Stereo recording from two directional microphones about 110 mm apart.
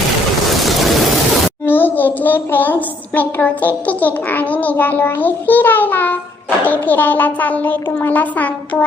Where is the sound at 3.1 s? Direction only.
15° left (ahead or behind).